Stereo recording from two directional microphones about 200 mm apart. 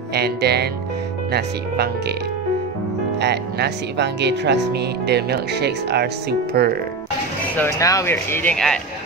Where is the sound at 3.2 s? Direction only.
55° right (ahead or behind).